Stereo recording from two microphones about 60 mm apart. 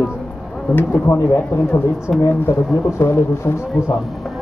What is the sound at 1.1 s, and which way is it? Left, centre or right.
Speech, left.